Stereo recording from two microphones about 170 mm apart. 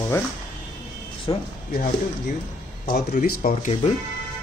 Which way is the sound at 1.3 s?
25° left (ahead or behind).